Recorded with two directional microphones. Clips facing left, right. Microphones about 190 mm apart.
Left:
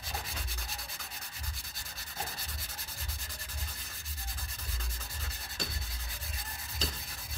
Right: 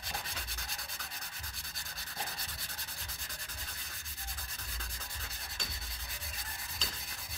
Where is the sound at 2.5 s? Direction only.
Centre (ahead or behind).